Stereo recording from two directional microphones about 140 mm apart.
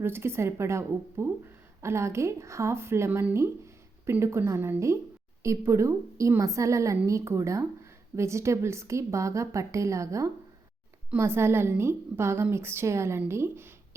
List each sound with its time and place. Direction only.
0.0 s a woman's voice: 15° right (ahead or behind)